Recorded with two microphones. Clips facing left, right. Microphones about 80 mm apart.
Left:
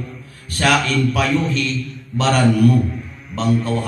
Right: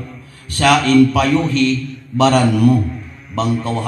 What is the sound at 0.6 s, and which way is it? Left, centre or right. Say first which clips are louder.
Mantra: right 6 dB; right.